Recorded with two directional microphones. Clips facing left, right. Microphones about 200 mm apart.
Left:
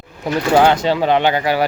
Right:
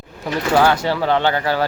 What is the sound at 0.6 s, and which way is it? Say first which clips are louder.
Speech: left 2 dB; 20° left (ahead or behind).